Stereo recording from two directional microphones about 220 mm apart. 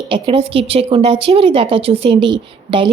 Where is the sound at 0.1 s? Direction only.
25° right (ahead or behind).